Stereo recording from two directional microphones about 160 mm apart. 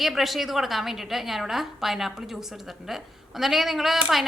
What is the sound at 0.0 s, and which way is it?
A woman's voice, centre (ahead or behind).